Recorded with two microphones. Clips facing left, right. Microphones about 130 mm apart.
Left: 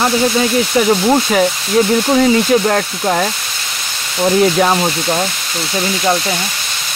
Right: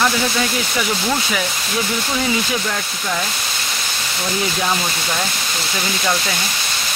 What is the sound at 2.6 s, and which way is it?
Speech, 50° left (ahead or behind).